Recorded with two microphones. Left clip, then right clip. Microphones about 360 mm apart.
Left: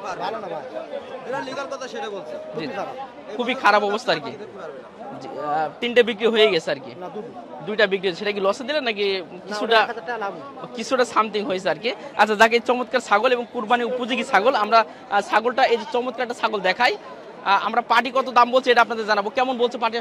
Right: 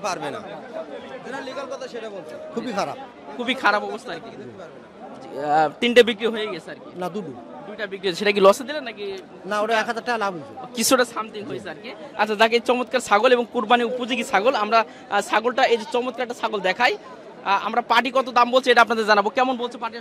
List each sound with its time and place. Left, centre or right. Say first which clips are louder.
1.6 s speech: left 2 dB; right
3.3 s a man's voice: left 2 dB; centre
3.9 s speech: left 10 dB; left
5.4 s a man's voice: right 4 dB; centre
6.3 s speech: left 11 dB; centre
8.0 s a man's voice: right 6 dB; centre
8.8 s speech: left 9 dB; left
9.8 s speech: right 3 dB; right
10.8 s speech: right 2 dB; right
11.1 s speech: left 9 dB; left
12.2 s a man's voice: left 2 dB; centre
19.8 s speech: left 7 dB; centre